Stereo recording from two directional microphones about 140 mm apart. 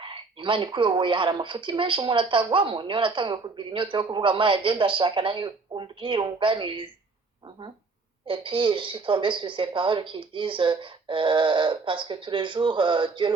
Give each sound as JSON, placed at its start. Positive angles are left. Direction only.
{"t": 0.0, "sound": "a woman's voice", "side_deg": -35}
{"t": 8.3, "sound": "a woman's voice", "side_deg": -40}